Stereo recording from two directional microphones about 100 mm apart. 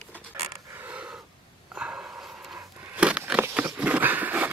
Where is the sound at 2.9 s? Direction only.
10° right (ahead or behind).